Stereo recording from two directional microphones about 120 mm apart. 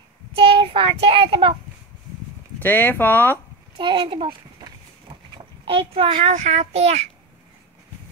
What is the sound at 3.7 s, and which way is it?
Speech, 40° right (ahead or behind).